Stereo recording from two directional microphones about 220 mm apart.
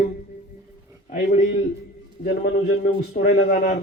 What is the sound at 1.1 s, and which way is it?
A man's voice, 40° left (ahead or behind).